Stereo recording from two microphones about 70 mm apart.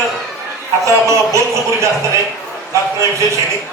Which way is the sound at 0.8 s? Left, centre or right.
Right.